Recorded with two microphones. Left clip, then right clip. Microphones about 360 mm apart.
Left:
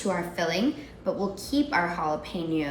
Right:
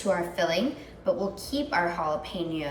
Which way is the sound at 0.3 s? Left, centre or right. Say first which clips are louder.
Even; centre.